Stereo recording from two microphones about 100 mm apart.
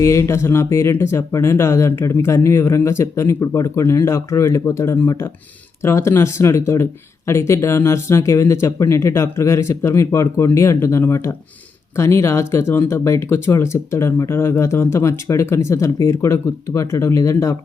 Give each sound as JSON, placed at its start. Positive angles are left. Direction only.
{"t": 0.0, "sound": "speech", "side_deg": 30}